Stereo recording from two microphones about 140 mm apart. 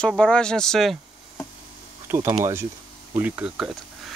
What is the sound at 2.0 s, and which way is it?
Speech, 20° right (ahead or behind).